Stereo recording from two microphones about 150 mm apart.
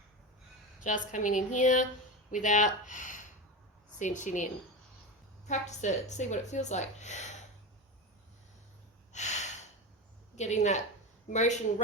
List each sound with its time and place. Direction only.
0.9 s a woman's voice: 55° left (ahead or behind)
5.5 s a woman's voice: 50° left (ahead or behind)
9.1 s gasp: 50° left (ahead or behind)
10.3 s a woman's voice: 50° left (ahead or behind)